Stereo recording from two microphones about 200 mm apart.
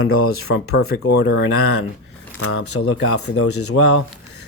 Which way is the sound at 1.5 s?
90° left.